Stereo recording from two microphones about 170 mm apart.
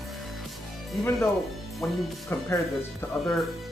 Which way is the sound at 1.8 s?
10° left (ahead or behind).